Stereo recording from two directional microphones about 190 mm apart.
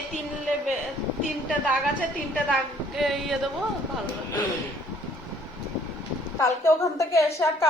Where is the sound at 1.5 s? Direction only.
5° right (ahead or behind).